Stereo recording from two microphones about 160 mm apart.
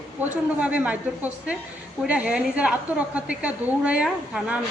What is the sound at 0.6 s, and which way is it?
A woman's voice, 10° right (ahead or behind).